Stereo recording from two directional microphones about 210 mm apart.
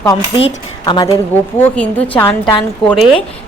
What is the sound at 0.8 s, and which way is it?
Speech, 20° left (ahead or behind).